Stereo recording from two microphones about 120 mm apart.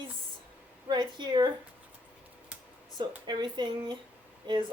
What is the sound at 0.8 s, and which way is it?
Speech, 40° right (ahead or behind).